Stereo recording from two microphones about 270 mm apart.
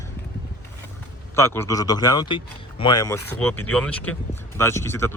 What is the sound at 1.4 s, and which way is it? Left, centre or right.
Speech, centre.